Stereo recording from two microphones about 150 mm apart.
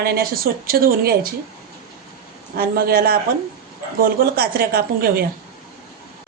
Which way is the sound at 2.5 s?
90° right.